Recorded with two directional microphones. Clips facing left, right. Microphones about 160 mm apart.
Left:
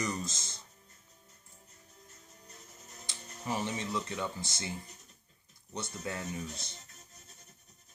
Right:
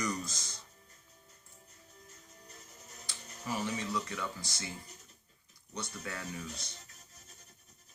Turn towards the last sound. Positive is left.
turn(degrees=20)  # may be behind; listen again after turning